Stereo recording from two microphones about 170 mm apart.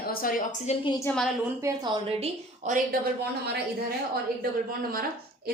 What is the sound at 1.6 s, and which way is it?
Speech, 15° right (ahead or behind).